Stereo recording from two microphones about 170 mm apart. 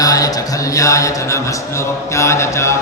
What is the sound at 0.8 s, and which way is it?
Speech, 20° left (ahead or behind).